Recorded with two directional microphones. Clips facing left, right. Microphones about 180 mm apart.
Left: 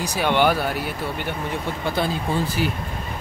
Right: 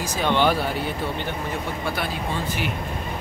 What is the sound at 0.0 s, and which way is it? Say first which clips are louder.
Speech: left 1 dB; 10° left (ahead or behind).